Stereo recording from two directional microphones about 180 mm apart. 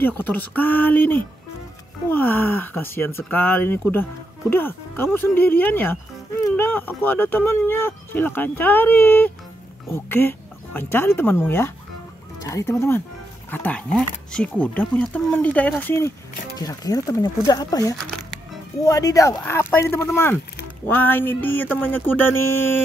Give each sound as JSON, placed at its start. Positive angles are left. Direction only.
{"t": 0.0, "sound": "speech", "side_deg": 10}